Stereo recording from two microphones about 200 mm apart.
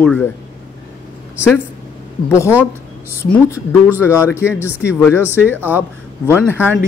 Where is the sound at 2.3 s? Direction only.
15° left (ahead or behind).